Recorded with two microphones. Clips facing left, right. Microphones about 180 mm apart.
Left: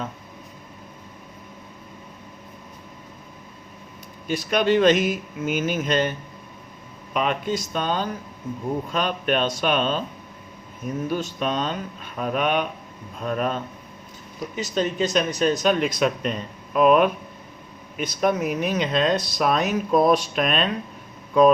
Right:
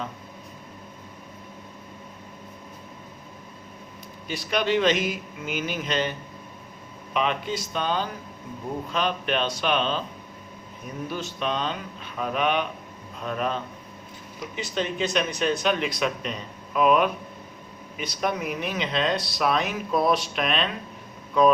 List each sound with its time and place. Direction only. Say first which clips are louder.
4.3 s speech: left 4 dB; 50° left (ahead or behind)
11.1 s speech: left 2 dB; 45° left (ahead or behind)